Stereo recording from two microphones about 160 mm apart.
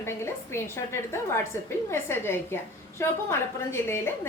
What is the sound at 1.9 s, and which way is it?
A woman's voice, 15° left (ahead or behind).